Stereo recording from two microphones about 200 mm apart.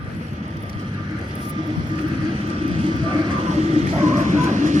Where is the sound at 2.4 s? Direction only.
25° right (ahead or behind).